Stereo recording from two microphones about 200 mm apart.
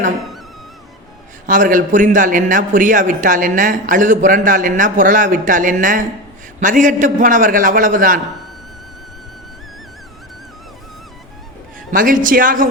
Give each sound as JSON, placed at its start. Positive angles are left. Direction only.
{"t": 1.5, "sound": "a man's voice", "side_deg": -40}
{"t": 11.9, "sound": "a woman's voice", "side_deg": -40}